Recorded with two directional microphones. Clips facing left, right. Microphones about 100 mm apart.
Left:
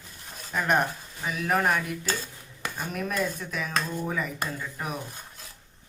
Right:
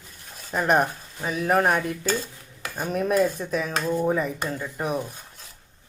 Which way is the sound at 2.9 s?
35° right (ahead or behind).